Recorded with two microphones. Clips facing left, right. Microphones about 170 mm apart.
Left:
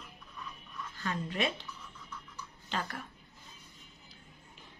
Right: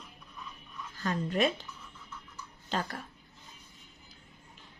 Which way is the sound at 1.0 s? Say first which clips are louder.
Right 5 dB; 40° right (ahead or behind).